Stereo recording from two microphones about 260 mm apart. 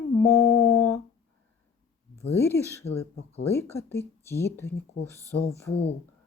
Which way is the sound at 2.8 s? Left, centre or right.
Left.